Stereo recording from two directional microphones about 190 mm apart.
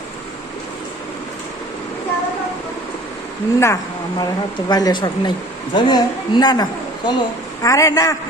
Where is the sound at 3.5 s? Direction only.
15° left (ahead or behind).